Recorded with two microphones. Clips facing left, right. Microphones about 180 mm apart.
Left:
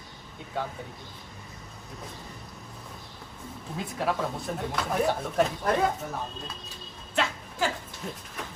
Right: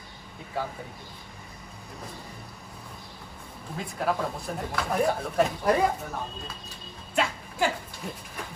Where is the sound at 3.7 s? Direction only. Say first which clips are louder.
Right 1 dB; centre (ahead or behind).